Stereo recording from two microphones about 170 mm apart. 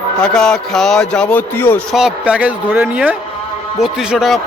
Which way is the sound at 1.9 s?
5° right (ahead or behind).